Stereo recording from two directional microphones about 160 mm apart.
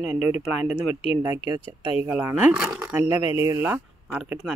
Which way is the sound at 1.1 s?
15° right (ahead or behind).